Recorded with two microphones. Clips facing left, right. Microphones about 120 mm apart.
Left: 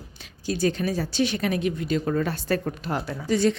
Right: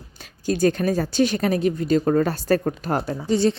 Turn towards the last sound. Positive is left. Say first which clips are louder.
# right 2 dB
turn(degrees=-30)  # may be behind; listen again after turning